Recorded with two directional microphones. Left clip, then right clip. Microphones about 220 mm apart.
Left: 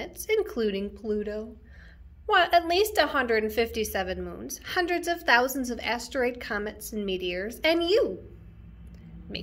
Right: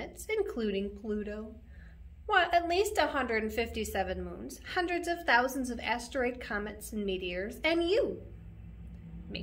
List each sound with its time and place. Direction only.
0.0 s a woman's voice: 30° left (ahead or behind)